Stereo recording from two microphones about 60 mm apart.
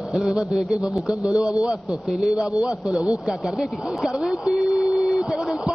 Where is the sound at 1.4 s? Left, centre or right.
Left.